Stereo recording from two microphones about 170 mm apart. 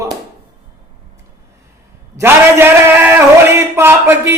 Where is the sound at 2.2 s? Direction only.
15° right (ahead or behind).